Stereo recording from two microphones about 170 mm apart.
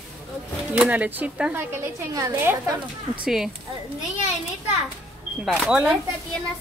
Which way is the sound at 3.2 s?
Centre (ahead or behind).